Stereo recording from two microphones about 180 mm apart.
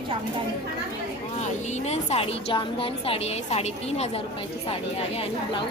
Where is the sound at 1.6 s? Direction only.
40° left (ahead or behind).